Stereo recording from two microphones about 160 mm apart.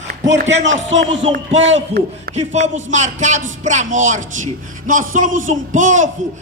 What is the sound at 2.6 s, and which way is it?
A man's voice, 50° right (ahead or behind).